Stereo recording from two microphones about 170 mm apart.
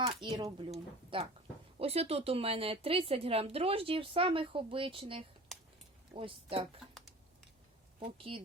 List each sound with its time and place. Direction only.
0.0 s speech: 30° right (ahead or behind)
5.5 s a sound: centre (ahead or behind)
6.1 s speech: 30° right (ahead or behind)
8.2 s speech: 35° right (ahead or behind)